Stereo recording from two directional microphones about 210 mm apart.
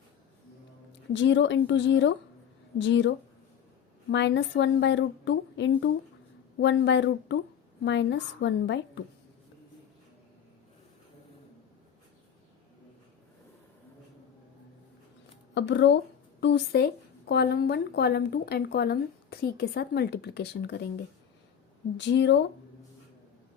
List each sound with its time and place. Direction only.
1.1 s a woman's voice: 60° left (ahead or behind)
15.5 s a woman's voice: 60° left (ahead or behind)
21.9 s a woman's voice: 55° left (ahead or behind)